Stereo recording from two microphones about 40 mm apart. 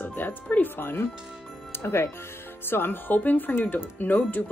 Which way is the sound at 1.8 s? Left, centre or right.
Left.